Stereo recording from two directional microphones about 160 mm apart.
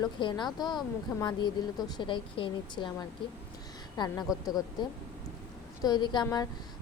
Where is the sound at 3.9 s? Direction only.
25° left (ahead or behind).